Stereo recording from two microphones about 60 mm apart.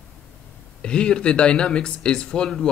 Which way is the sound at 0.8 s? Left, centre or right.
Centre.